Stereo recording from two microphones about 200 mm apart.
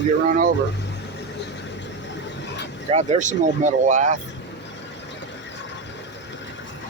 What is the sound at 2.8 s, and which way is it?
Speech, 35° right (ahead or behind).